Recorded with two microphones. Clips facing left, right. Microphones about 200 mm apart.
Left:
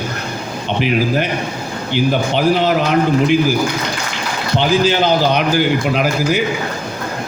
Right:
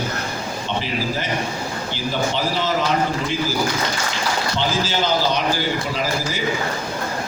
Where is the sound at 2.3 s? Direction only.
60° left (ahead or behind).